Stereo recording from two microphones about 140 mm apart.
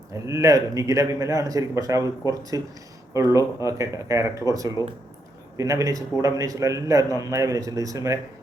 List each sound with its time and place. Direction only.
0.3 s a man's voice: 20° right (ahead or behind)
4.8 s speech: 25° left (ahead or behind)
5.5 s a man's voice: 20° right (ahead or behind)